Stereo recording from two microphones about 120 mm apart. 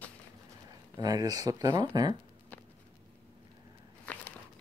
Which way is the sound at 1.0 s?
30° right (ahead or behind).